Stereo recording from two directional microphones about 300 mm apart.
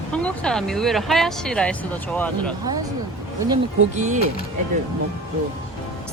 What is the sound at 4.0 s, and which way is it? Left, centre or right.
Speech, right.